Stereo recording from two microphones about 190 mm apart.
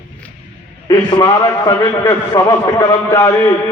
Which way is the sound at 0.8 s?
20° left (ahead or behind).